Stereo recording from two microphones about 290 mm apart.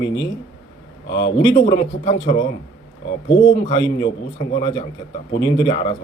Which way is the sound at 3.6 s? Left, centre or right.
Centre.